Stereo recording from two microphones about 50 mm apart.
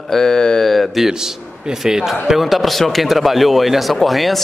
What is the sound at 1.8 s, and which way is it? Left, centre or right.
Speech, centre.